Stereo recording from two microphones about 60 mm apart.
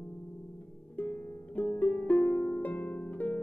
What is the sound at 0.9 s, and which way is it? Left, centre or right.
Harp, left.